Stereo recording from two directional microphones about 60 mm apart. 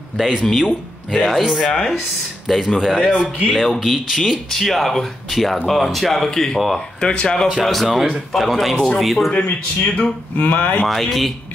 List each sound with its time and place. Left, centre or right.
0.2 s speech: centre
1.7 s speech: centre
7.4 s speech: centre
10.3 s speech: left
10.9 s speech: centre